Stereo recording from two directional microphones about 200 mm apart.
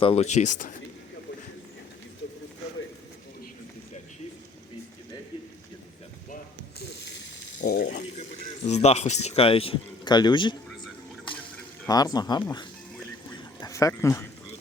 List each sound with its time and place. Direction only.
0.0 s speech: 30° left (ahead or behind)
7.7 s speech: 50° left (ahead or behind); by 10.6 s 25° left (ahead or behind)
11.9 s speech: 20° left (ahead or behind)